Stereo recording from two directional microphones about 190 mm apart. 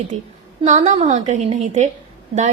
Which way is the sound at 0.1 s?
35° right (ahead or behind).